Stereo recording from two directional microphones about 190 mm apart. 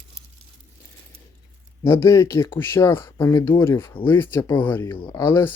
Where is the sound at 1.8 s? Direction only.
15° left (ahead or behind).